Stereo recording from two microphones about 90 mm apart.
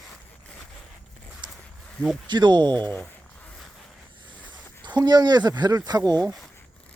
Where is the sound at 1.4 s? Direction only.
60° right (ahead or behind).